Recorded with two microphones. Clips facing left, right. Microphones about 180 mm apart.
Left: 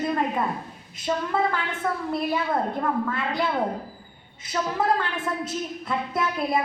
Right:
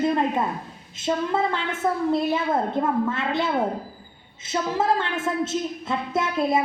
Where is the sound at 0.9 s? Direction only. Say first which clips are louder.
Right 2 dB; 25° right (ahead or behind).